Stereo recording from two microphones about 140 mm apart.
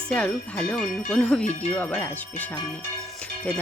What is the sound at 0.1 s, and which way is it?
Speech, 10° left (ahead or behind).